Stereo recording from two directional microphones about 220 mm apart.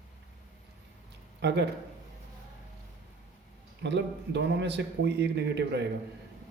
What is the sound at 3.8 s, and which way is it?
A man's voice, 50° right (ahead or behind).